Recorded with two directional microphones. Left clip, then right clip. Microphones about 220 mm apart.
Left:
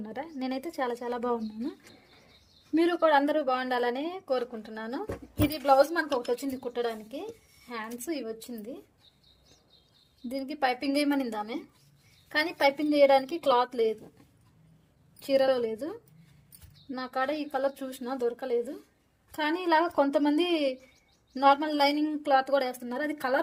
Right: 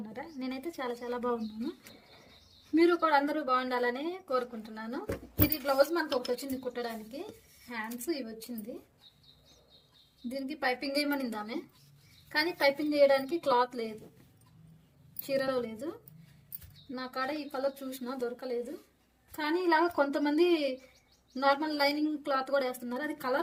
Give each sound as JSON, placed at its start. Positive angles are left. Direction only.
{"t": 0.1, "sound": "a woman's voice", "side_deg": 45}
{"t": 2.7, "sound": "a woman's voice", "side_deg": 35}
{"t": 10.2, "sound": "a woman's voice", "side_deg": 45}
{"t": 15.2, "sound": "a woman's voice", "side_deg": 45}